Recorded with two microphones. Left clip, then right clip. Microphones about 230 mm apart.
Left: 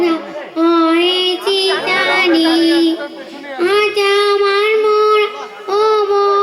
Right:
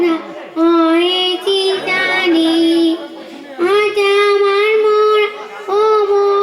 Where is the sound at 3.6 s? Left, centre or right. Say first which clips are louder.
Even; centre.